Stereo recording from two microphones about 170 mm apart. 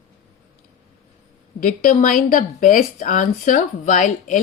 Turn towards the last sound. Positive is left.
turn(degrees=50)  # may be behind; listen again after turning